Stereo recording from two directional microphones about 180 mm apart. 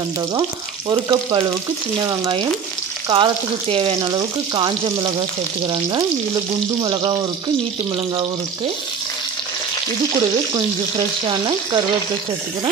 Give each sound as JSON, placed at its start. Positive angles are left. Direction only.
{"t": 0.3, "sound": "frying", "side_deg": -20}
{"t": 10.5, "sound": "frying", "side_deg": -30}